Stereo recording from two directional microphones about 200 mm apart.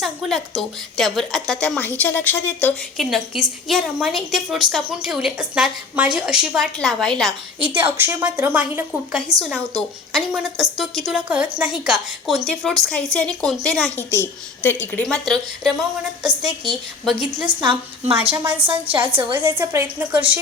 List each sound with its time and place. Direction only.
0.0 s a woman's voice: centre (ahead or behind)
7.7 s a woman's voice: 10° right (ahead or behind)
17.4 s a woman's voice: 25° right (ahead or behind)
19.3 s a woman's voice: 10° right (ahead or behind)